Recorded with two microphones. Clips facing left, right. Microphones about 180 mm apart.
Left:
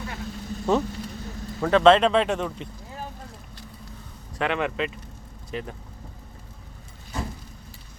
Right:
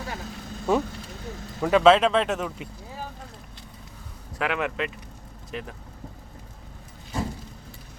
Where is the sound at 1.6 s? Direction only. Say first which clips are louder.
Left 1 dB; 5° right (ahead or behind).